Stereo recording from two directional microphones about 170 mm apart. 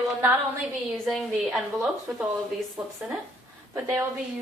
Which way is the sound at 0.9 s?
Centre (ahead or behind).